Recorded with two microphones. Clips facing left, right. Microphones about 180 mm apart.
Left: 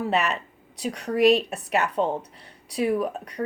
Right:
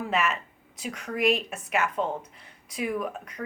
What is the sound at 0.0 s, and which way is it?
Speech, 35° left (ahead or behind).